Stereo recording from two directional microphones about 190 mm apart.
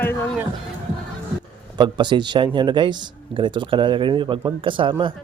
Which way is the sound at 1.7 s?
25° right (ahead or behind).